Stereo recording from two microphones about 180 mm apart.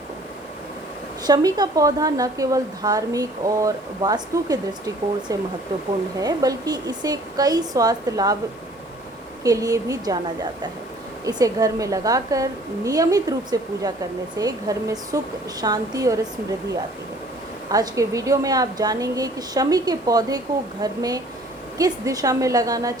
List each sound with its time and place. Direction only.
1.3 s a woman's voice: 20° right (ahead or behind)
9.4 s a woman's voice: 20° right (ahead or behind)
11.3 s a woman's voice: 20° right (ahead or behind)
17.7 s a woman's voice: 20° right (ahead or behind)